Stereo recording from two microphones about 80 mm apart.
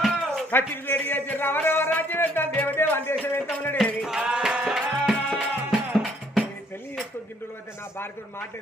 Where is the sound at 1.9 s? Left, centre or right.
Left.